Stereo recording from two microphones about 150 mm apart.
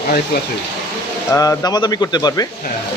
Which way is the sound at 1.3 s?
20° left (ahead or behind).